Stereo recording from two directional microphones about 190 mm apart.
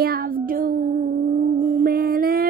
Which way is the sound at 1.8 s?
50° right (ahead or behind).